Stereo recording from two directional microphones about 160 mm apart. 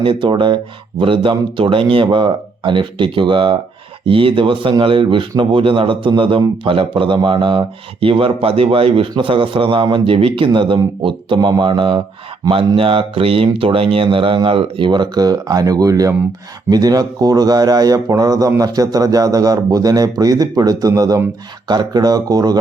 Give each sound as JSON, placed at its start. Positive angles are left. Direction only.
{"t": 0.0, "sound": "a man's voice", "side_deg": -30}